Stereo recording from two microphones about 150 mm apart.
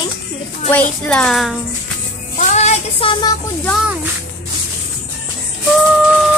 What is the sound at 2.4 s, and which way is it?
Child singing, 50° left (ahead or behind).